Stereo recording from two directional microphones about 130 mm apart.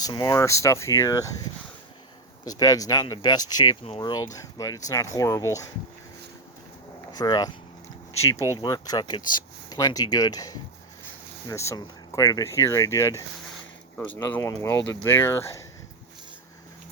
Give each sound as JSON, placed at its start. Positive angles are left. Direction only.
{"t": 0.0, "sound": "speech", "side_deg": 30}
{"t": 2.5, "sound": "speech", "side_deg": 25}
{"t": 7.1, "sound": "speech", "side_deg": 30}
{"t": 8.5, "sound": "speech", "side_deg": 30}